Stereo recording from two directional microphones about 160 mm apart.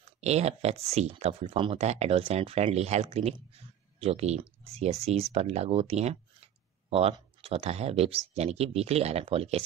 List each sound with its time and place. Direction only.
0.2 s speech: 45° right (ahead or behind)